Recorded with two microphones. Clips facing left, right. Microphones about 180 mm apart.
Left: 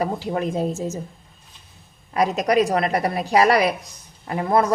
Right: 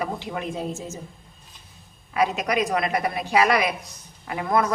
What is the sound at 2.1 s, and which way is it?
A woman's voice, 35° left (ahead or behind).